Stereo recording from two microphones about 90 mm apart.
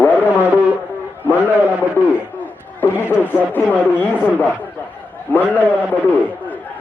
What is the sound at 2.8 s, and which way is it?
Speech, 25° left (ahead or behind).